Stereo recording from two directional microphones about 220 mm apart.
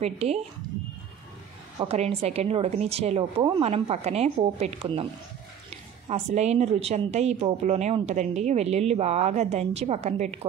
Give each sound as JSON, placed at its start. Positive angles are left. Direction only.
{"t": 0.0, "sound": "a woman's voice", "side_deg": -30}
{"t": 1.8, "sound": "a woman's voice", "side_deg": -30}
{"t": 6.0, "sound": "a woman's voice", "side_deg": -30}